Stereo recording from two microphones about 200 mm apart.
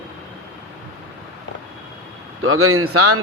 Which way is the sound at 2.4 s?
90° right.